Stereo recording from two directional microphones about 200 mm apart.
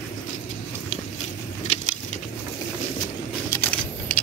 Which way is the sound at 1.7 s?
35° left (ahead or behind).